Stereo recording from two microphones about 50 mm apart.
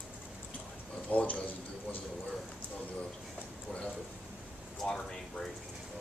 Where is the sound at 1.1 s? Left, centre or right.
Left.